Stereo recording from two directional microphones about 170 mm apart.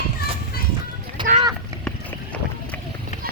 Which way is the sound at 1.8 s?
5° left (ahead or behind).